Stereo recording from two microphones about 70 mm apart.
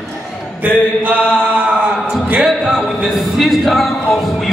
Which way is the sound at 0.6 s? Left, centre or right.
Right.